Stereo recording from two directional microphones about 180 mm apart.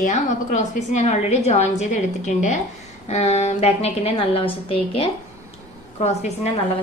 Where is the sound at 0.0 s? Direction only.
40° left (ahead or behind).